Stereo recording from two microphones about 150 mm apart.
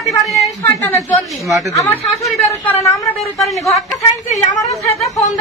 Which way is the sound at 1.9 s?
15° left (ahead or behind).